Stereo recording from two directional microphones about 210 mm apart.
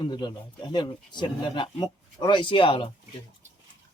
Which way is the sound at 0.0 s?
20° left (ahead or behind).